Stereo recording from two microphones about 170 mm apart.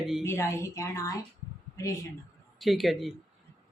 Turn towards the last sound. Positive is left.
turn(degrees=0)  # may be behind; listen again after turning